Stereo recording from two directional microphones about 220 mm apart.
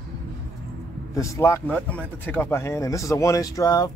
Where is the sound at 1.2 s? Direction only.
15° left (ahead or behind).